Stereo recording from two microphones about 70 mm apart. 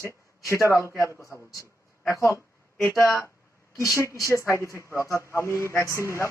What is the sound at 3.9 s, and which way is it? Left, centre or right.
Speech, left.